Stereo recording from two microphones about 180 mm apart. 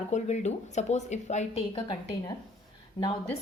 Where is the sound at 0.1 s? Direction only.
40° left (ahead or behind).